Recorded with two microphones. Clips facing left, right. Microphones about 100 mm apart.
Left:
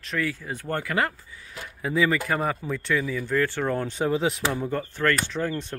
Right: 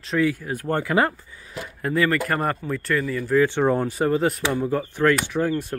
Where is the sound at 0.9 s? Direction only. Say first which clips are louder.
Right 6 dB; 30° right (ahead or behind).